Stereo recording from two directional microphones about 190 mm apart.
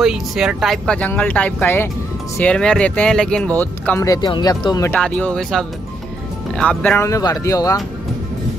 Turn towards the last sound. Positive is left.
turn(degrees=15)  # may be behind; listen again after turning